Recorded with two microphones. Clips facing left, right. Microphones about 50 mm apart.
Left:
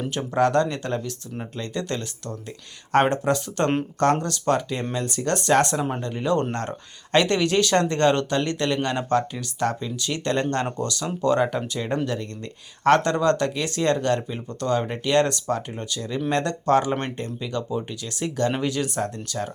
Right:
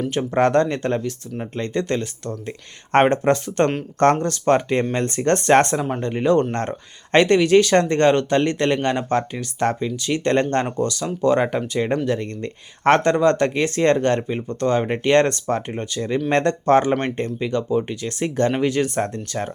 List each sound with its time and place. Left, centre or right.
0.1 s speech: right